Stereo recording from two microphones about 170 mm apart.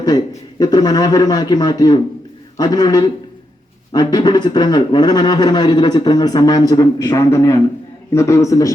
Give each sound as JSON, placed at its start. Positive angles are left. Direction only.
{"t": 0.6, "sound": "a man's voice", "side_deg": 25}